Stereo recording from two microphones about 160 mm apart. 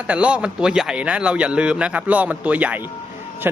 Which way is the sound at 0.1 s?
10° right (ahead or behind).